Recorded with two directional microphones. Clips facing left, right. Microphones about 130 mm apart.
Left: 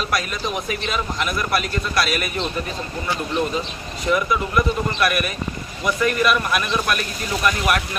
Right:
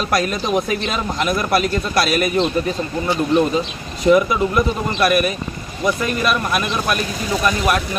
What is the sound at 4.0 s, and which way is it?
Speech, 25° right (ahead or behind).